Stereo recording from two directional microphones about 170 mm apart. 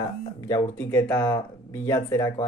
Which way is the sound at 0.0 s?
20° left (ahead or behind).